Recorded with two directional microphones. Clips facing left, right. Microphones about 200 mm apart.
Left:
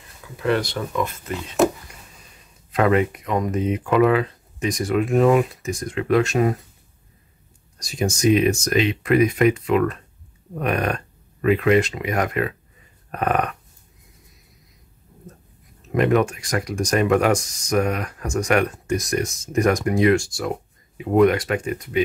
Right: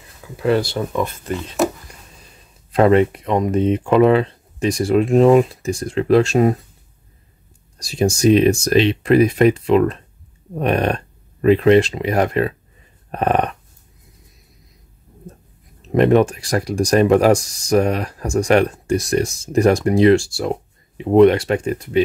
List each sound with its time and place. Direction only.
0.4 s speech: 30° right (ahead or behind)
1.6 s speech: centre (ahead or behind)
2.7 s speech: 30° right (ahead or behind)
7.8 s speech: 30° right (ahead or behind)
15.9 s speech: 30° right (ahead or behind)